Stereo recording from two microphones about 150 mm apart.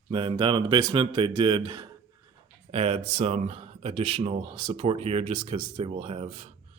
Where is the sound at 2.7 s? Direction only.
40° right (ahead or behind).